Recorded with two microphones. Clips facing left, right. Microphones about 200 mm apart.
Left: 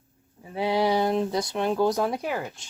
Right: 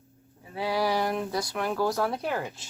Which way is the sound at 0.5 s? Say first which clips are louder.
Left 4 dB; 25° left (ahead or behind).